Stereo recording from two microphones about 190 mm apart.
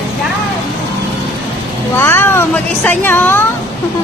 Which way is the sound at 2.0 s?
10° left (ahead or behind).